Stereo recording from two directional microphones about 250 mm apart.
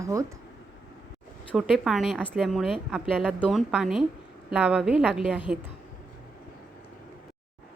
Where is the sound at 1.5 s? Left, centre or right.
Centre.